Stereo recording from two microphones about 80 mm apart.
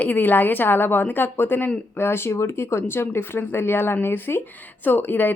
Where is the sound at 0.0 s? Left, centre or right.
Left.